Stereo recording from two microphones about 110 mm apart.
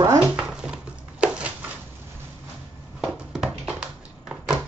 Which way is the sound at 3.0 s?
10° right (ahead or behind).